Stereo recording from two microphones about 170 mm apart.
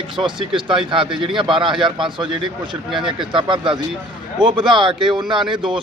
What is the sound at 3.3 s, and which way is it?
Speech, 30° right (ahead or behind).